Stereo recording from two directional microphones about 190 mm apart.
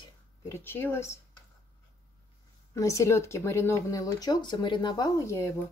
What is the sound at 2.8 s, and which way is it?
Speech, 15° left (ahead or behind).